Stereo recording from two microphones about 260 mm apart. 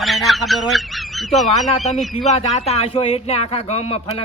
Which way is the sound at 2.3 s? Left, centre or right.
Left.